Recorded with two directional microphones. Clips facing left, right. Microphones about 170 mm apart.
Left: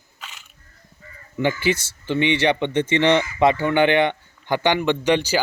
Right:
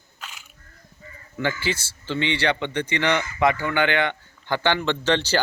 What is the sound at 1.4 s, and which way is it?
A man's voice, 20° left (ahead or behind).